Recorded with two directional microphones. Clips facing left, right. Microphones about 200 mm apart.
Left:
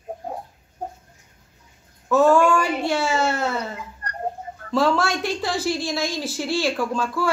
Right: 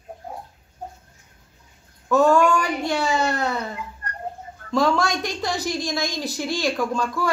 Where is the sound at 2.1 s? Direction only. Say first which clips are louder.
Left 1 dB; 5° left (ahead or behind).